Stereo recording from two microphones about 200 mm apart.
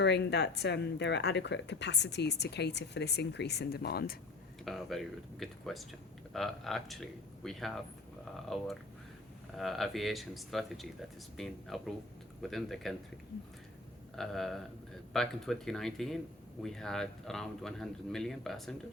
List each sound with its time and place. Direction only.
0.0 s speech: 60° left (ahead or behind)
4.6 s speech: centre (ahead or behind)
14.2 s speech: centre (ahead or behind)